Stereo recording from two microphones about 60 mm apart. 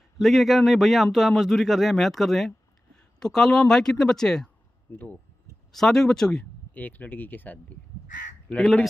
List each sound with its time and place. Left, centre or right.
0.2 s speech: centre
4.9 s speech: left
5.7 s speech: centre
6.7 s speech: left
8.5 s speech: centre